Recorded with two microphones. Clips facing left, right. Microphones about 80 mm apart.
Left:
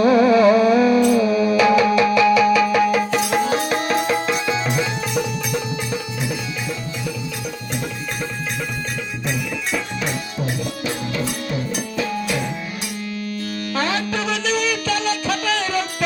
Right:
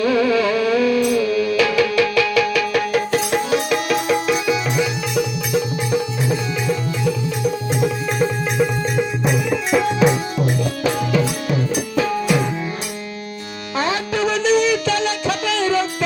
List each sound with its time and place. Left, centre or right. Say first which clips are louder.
0.0 s music: left 4 dB; left; by 3.4 s centre
3.4 s music: right 1 dB; left
5.5 s music: right 4 dB; right
7.7 s music: right 7 dB; centre
13.7 s music: right 3 dB; right